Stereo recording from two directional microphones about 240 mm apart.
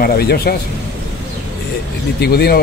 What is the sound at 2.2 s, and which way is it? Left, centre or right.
Speech, left.